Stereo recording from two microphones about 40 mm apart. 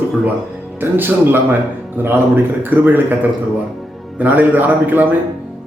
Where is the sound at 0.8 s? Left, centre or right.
Right.